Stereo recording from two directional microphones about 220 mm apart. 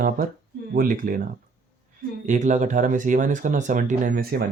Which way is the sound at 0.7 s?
40° right (ahead or behind).